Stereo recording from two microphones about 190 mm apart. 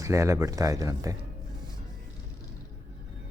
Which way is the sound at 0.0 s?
15° right (ahead or behind).